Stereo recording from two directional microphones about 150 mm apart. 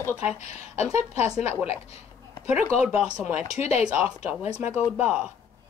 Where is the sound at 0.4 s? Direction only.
45° left (ahead or behind).